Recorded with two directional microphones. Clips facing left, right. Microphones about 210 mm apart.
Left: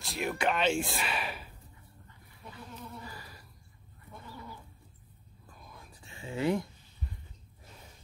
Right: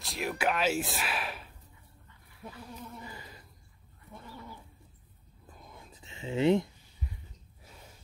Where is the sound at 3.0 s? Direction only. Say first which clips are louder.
Right 1 dB; 20° right (ahead or behind).